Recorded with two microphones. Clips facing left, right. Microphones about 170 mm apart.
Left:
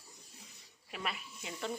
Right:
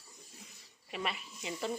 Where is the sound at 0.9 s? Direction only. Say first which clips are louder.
Right 3 dB; centre (ahead or behind).